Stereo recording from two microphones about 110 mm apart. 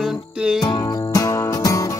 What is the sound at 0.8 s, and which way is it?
Music, 30° left (ahead or behind).